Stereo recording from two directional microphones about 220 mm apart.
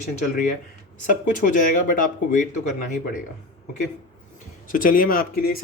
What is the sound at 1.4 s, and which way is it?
Speech, 40° left (ahead or behind).